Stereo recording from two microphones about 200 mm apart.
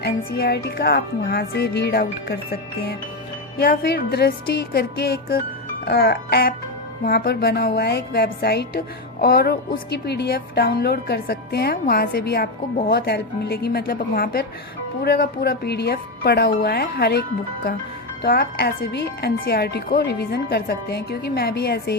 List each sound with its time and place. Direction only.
0.0 s speech: 50° left (ahead or behind)
3.6 s speech: 50° left (ahead or behind)